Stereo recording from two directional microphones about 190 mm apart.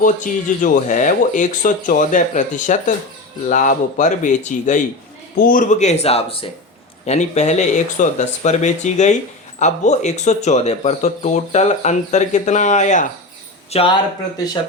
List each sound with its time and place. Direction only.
0.0 s speech: 40° left (ahead or behind)